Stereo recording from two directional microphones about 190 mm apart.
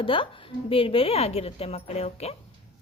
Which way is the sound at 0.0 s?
30° left (ahead or behind).